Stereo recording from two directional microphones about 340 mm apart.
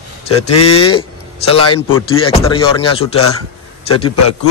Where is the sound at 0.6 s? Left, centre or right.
Centre.